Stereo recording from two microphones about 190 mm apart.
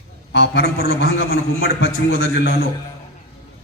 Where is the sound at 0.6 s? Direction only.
50° right (ahead or behind).